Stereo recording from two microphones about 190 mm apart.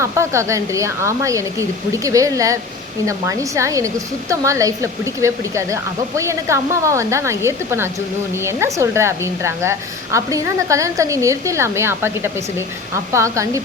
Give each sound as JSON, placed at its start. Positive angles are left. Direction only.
{"t": 0.0, "sound": "speech", "side_deg": -15}